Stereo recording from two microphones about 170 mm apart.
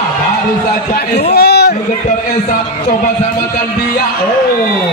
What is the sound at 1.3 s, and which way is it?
Speech, 70° left (ahead or behind).